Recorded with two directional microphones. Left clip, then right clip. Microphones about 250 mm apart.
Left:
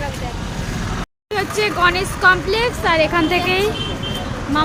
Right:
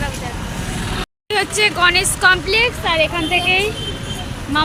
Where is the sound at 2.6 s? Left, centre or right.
Centre.